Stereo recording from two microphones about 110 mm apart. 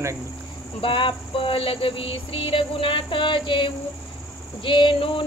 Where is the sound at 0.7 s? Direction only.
50° left (ahead or behind).